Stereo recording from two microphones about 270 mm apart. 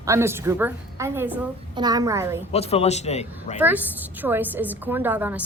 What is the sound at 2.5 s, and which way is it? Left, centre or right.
Speech, left.